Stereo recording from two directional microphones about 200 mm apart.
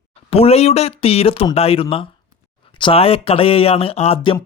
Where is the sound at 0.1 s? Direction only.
30° left (ahead or behind).